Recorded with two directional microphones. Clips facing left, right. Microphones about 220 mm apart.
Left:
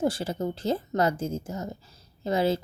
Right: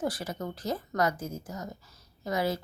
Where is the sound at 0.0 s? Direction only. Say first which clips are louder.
Left 6 dB; 25° left (ahead or behind).